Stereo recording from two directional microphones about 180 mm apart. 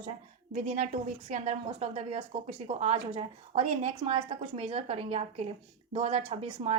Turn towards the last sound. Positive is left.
turn(degrees=-35)  # may be behind; listen again after turning